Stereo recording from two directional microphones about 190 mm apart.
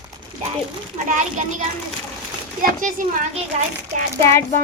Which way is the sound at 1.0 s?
40° right (ahead or behind).